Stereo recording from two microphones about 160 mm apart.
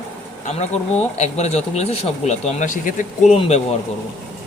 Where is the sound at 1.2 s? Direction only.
45° left (ahead or behind).